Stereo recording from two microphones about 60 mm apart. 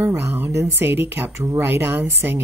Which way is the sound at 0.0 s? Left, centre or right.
Right.